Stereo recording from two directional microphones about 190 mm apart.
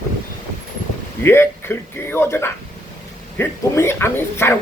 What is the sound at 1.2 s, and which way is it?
Speech, 10° left (ahead or behind).